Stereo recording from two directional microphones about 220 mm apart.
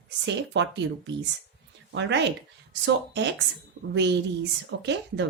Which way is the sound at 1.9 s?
55° right (ahead or behind).